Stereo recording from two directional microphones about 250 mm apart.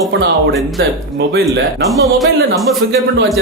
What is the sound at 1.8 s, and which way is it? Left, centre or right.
Speech, centre.